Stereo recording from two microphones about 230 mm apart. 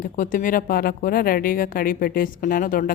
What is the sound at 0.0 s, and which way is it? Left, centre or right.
A woman's voice, left.